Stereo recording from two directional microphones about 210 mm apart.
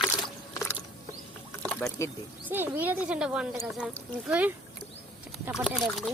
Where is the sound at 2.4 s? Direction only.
10° right (ahead or behind).